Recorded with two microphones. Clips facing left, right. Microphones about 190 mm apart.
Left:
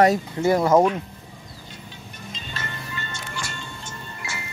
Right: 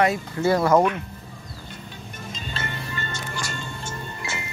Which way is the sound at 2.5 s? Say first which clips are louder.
Right 2 dB; 30° right (ahead or behind).